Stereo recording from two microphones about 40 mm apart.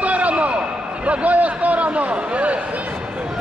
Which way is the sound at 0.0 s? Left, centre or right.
Right.